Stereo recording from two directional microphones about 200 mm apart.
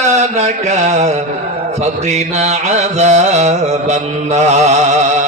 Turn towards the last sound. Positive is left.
turn(degrees=-35)  # may be behind; listen again after turning